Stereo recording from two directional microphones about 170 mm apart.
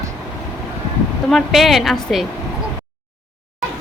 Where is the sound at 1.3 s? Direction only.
Centre (ahead or behind).